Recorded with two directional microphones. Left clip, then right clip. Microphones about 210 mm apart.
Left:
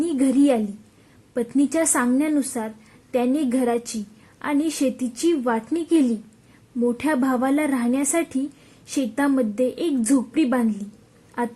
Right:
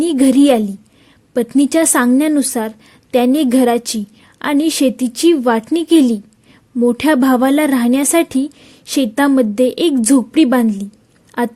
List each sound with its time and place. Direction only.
0.0 s a woman's voice: 40° right (ahead or behind)